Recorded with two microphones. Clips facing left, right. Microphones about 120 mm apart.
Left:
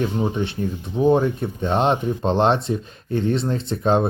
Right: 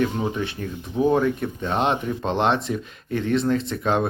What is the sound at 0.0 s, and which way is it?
Speech, 30° left (ahead or behind).